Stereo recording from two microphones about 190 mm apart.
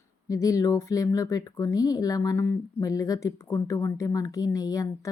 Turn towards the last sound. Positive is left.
turn(degrees=20)  # may be behind; listen again after turning